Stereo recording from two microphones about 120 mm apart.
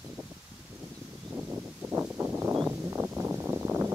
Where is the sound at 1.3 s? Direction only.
10° right (ahead or behind).